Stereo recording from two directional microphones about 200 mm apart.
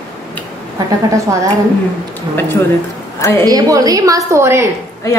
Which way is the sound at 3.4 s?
20° right (ahead or behind).